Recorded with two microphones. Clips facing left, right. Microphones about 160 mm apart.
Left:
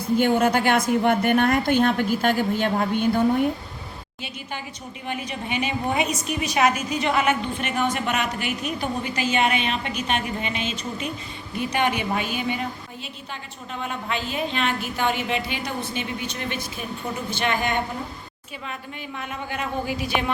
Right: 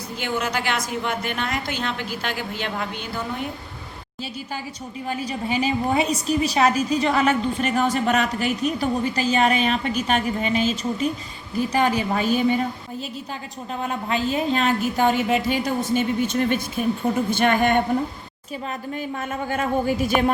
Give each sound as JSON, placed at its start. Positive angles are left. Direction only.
{"t": 0.2, "sound": "a woman's voice", "side_deg": 50}
{"t": 5.0, "sound": "a woman's voice", "side_deg": -35}
{"t": 14.1, "sound": "a woman's voice", "side_deg": -40}
{"t": 18.9, "sound": "a woman's voice", "side_deg": -45}